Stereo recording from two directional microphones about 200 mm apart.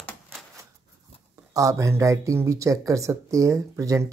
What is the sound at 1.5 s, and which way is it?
Speech, 15° right (ahead or behind).